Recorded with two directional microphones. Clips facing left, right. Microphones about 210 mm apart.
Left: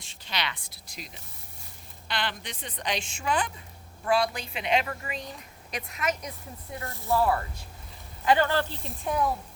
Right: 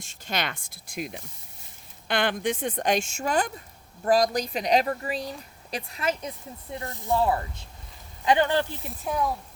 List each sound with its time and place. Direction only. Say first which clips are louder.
0.0 s a woman's voice: right 4 dB; 45° right (ahead or behind); by 6.3 s 30° right (ahead or behind)
6.7 s speech: right 1 dB; 20° right (ahead or behind)
9.0 s speech: even; centre (ahead or behind)